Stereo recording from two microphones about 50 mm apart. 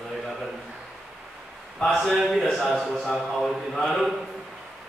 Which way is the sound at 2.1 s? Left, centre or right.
Centre.